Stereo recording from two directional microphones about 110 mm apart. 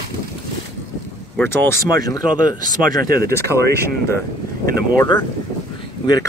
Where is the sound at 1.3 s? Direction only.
20° left (ahead or behind).